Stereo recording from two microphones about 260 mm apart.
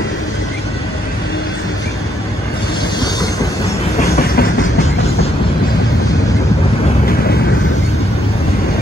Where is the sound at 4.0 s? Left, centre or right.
Left.